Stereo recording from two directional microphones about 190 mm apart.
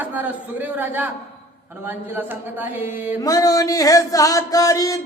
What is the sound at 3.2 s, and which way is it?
Music, 20° left (ahead or behind).